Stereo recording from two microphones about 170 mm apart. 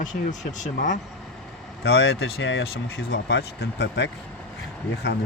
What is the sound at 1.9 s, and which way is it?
Speech, 90° left.